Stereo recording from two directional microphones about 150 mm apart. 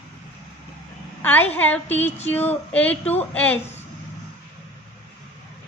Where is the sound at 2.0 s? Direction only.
45° left (ahead or behind).